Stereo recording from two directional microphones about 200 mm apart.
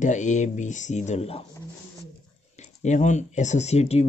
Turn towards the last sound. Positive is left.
turn(degrees=30)  # may be behind; listen again after turning